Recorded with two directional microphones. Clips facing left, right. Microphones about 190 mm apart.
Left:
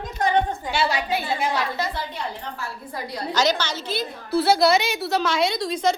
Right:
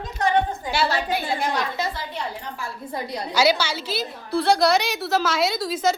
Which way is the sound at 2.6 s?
20° right (ahead or behind).